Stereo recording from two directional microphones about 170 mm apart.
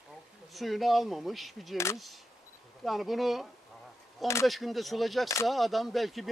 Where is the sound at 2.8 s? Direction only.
Centre (ahead or behind).